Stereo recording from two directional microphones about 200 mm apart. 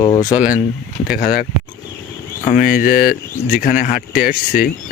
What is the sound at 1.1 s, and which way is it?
Speech, 45° left (ahead or behind).